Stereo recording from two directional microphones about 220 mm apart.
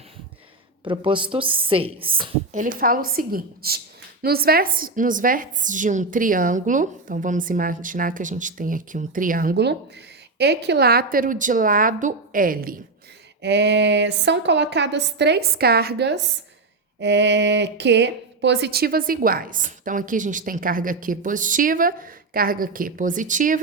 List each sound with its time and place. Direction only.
0.9 s a woman's voice: 20° right (ahead or behind)
2.6 s speech: 40° right (ahead or behind)
13.4 s a woman's voice: 50° right (ahead or behind); by 23.6 s 35° right (ahead or behind)